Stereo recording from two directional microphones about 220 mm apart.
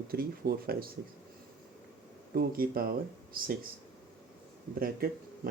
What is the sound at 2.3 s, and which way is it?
Speech, 40° right (ahead or behind).